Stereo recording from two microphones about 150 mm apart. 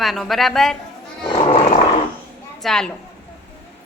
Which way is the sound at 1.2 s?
35° left (ahead or behind).